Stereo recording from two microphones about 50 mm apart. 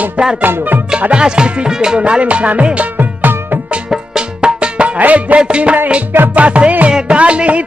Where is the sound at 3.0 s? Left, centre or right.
Right.